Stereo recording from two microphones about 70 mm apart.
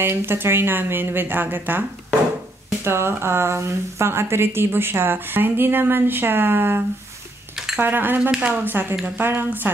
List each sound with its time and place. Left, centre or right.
0.0 s speech: right
7.5 s dishes: centre
7.8 s speech: right
8.3 s speech: centre
8.6 s speech: right